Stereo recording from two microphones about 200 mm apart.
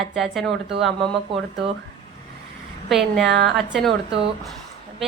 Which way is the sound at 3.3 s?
60° right (ahead or behind).